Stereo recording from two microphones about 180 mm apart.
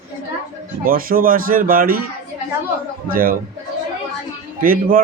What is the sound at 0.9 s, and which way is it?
A man's voice, 50° right (ahead or behind).